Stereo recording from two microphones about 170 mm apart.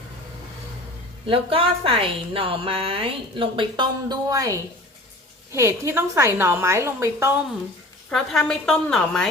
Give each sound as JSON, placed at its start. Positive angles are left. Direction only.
{"t": 1.3, "sound": "a woman's voice", "side_deg": -35}
{"t": 8.1, "sound": "a woman's voice", "side_deg": 5}